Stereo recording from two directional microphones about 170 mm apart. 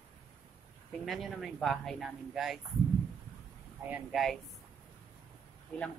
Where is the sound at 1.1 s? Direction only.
Centre (ahead or behind).